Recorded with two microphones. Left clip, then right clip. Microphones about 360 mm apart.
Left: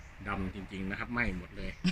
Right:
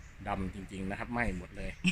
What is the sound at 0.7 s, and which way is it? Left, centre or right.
Speech, centre.